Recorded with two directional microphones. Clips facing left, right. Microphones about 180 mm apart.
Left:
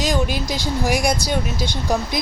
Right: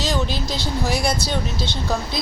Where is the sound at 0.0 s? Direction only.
15° left (ahead or behind).